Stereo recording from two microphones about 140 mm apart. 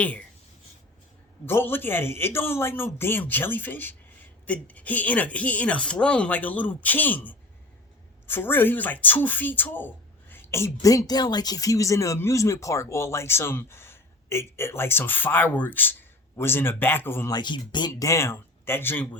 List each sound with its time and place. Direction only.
0.0 s speech: 10° left (ahead or behind)
1.5 s speech: 15° left (ahead or behind)
17.3 s speech: 35° left (ahead or behind); by 19.0 s 15° left (ahead or behind)